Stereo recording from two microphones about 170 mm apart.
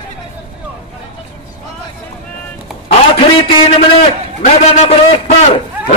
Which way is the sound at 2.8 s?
35° left (ahead or behind).